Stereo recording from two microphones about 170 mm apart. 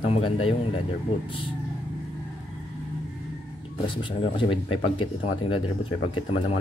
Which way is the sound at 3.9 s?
30° left (ahead or behind).